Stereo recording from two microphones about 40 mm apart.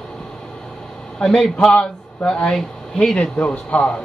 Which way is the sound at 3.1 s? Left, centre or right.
Left.